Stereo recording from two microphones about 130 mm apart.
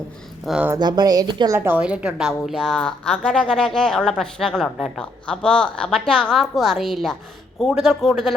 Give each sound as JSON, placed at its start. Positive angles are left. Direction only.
{"t": 0.5, "sound": "a woman's voice", "side_deg": 0}
{"t": 0.8, "sound": "a woman's voice", "side_deg": -35}
{"t": 1.5, "sound": "a woman's voice", "side_deg": -15}